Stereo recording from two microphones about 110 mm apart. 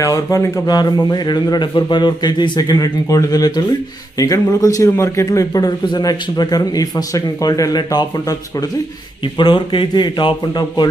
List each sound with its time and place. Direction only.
0.0 s a man's voice: 30° left (ahead or behind)
9.4 s a man's voice: 45° left (ahead or behind)